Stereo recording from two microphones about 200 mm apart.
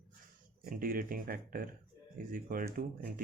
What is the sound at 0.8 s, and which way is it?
Speech, 45° right (ahead or behind).